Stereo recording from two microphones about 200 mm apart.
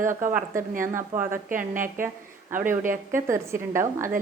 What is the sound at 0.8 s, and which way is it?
Speech, 15° right (ahead or behind).